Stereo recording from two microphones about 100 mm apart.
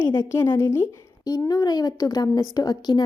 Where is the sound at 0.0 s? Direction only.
25° left (ahead or behind).